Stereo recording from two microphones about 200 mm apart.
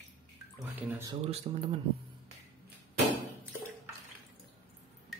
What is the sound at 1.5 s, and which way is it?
Speech, 25° right (ahead or behind).